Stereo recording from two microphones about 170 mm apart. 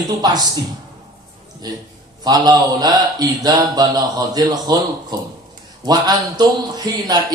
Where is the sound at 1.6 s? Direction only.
25° right (ahead or behind).